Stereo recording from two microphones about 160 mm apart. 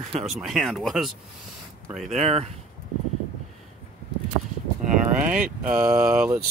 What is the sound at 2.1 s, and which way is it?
Speech, 40° right (ahead or behind).